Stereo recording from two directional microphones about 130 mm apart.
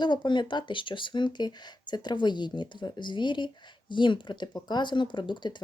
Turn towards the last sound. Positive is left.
turn(degrees=35)  # may be behind; listen again after turning